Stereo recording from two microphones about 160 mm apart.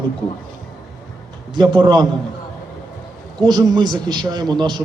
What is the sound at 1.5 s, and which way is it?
Speech, 30° right (ahead or behind).